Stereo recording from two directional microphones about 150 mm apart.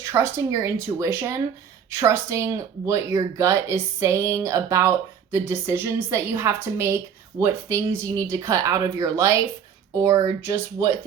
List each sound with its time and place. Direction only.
0.0 s a woman's voice: 20° right (ahead or behind)